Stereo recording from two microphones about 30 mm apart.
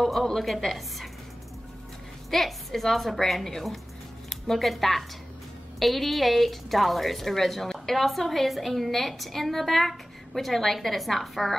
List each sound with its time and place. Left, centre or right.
0.0 s a woman's voice: centre
2.3 s a woman's voice: centre